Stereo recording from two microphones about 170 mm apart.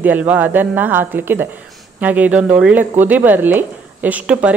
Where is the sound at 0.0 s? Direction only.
10° right (ahead or behind).